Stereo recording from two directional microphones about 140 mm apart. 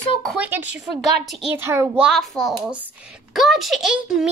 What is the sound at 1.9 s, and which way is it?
A child's voice, 5° right (ahead or behind).